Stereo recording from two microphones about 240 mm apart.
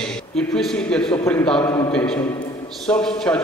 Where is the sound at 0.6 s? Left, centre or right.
Centre.